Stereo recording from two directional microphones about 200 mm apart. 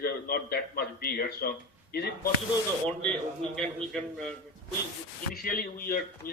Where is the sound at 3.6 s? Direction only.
5° left (ahead or behind).